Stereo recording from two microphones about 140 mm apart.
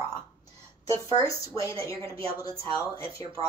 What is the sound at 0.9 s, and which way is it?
A woman's voice, 25° left (ahead or behind).